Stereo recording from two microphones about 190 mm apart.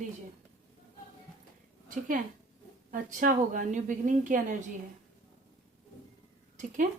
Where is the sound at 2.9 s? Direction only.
45° right (ahead or behind).